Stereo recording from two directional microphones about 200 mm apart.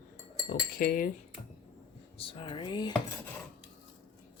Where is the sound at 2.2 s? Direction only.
25° left (ahead or behind).